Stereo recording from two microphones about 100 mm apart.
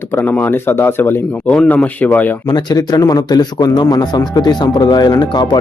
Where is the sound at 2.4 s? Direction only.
45° left (ahead or behind).